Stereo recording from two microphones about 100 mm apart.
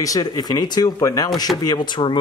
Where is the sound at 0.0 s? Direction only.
40° left (ahead or behind).